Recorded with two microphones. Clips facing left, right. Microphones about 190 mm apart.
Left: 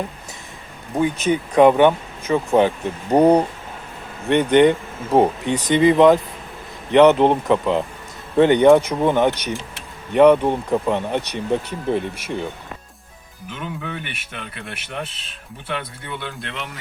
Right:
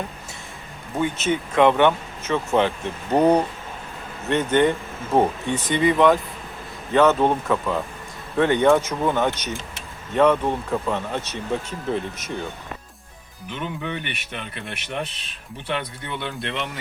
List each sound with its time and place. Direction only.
0.9 s speech: 15° left (ahead or behind)
13.5 s speech: 5° left (ahead or behind)